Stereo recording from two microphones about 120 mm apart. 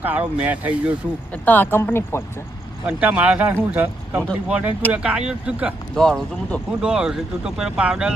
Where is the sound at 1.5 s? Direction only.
15° left (ahead or behind).